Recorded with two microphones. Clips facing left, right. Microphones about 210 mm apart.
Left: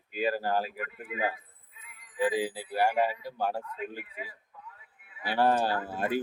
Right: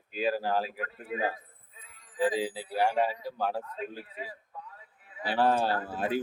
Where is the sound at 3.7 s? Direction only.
35° right (ahead or behind).